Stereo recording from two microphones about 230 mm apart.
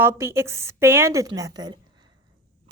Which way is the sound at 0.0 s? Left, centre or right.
Centre.